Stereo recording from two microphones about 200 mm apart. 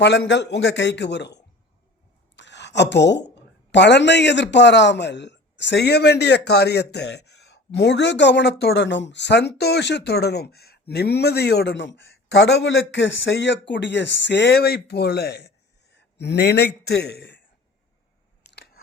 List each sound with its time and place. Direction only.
0.0 s a woman's voice: 60° left (ahead or behind)
18.5 s scissors: 55° left (ahead or behind)